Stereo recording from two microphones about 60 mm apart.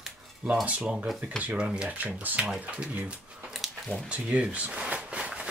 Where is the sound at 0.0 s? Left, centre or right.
Centre.